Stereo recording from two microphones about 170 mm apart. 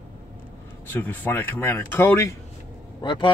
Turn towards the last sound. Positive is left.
turn(degrees=30)  # may be behind; listen again after turning